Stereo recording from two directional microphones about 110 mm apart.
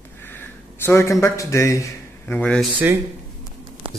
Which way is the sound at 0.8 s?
25° left (ahead or behind).